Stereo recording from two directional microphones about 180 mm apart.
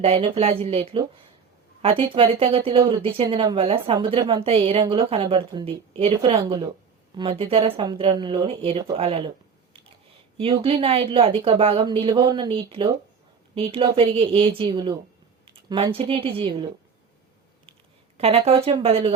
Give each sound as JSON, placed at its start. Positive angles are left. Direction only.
{"t": 0.0, "sound": "speech", "side_deg": -35}
{"t": 10.3, "sound": "speech", "side_deg": -30}
{"t": 18.2, "sound": "speech", "side_deg": -35}